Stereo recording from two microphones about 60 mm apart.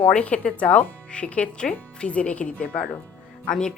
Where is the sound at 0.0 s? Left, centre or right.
Centre.